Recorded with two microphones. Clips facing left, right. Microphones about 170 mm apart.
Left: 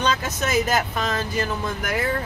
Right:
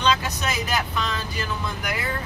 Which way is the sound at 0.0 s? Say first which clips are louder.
Even; 45° left (ahead or behind).